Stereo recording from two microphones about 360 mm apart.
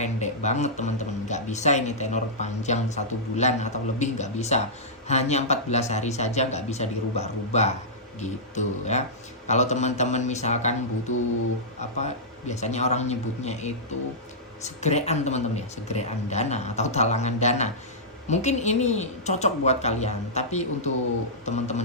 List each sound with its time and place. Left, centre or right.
0.0 s speech: centre